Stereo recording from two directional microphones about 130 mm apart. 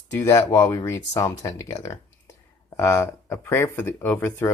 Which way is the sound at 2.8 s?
20° left (ahead or behind).